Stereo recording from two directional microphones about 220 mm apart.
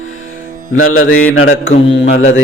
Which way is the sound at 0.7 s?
70° left (ahead or behind).